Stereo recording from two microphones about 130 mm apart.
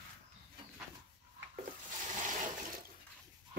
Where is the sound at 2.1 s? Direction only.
75° right (ahead or behind).